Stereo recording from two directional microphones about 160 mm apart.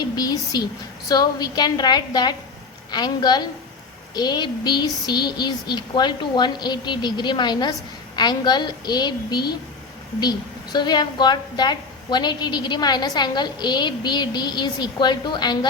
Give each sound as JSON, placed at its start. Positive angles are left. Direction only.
{"t": 0.0, "sound": "a woman's voice", "side_deg": 25}